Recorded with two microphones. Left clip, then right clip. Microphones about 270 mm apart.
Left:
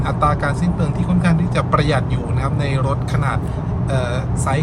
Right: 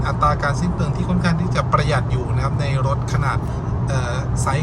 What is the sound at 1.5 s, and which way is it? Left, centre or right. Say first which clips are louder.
Speech: left 1 dB; centre.